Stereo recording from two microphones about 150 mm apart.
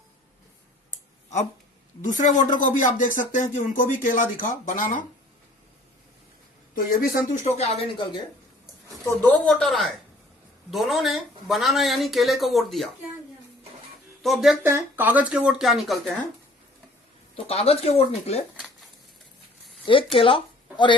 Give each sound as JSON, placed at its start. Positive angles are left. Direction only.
{"t": 2.0, "sound": "speech", "side_deg": 55}
{"t": 6.7, "sound": "speech", "side_deg": 75}
{"t": 7.4, "sound": "speech", "side_deg": 45}
{"t": 9.0, "sound": "speech", "side_deg": 10}
{"t": 14.2, "sound": "speech", "side_deg": 0}
{"t": 14.6, "sound": "speech", "side_deg": -15}
{"t": 17.3, "sound": "speech", "side_deg": 40}
{"t": 19.8, "sound": "speech", "side_deg": 35}